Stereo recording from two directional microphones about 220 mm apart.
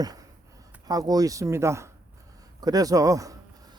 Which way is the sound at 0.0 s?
15° right (ahead or behind).